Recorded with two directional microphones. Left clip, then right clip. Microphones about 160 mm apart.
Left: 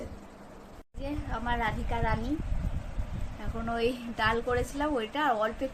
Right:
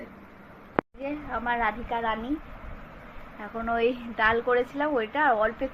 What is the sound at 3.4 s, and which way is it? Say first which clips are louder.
A woman's voice: right 5 dB; centre (ahead or behind).